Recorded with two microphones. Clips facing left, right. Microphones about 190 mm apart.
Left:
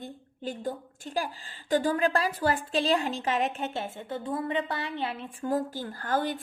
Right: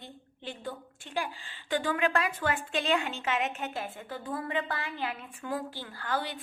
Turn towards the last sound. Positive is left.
turn(degrees=45)  # may be behind; listen again after turning